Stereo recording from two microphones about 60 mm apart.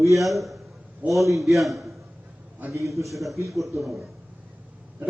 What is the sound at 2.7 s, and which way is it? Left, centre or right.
Speech, right.